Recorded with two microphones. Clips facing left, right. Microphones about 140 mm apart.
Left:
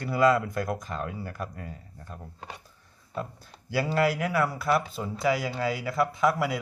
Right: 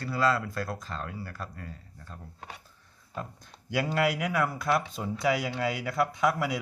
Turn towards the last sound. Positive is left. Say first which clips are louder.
# left 2 dB
turn(degrees=0)  # may be behind; listen again after turning